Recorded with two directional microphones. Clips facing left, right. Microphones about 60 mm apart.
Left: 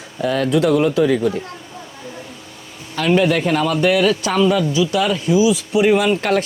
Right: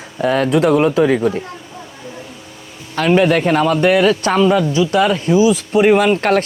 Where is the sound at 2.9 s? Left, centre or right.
Right.